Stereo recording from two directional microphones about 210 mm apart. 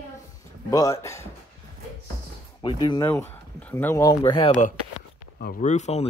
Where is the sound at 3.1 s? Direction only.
10° left (ahead or behind).